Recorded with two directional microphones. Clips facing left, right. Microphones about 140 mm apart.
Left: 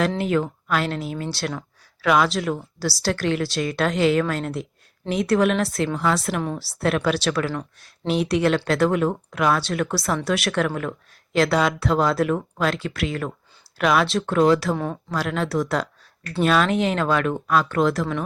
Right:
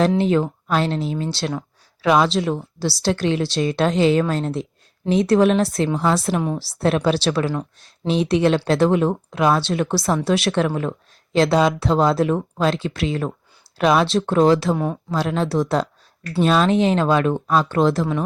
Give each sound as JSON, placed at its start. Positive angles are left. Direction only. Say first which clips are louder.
{"t": 0.2, "sound": "speech", "louder": "right 4 dB", "side_deg": -25}